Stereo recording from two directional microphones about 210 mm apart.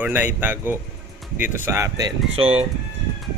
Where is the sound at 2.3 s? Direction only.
30° right (ahead or behind).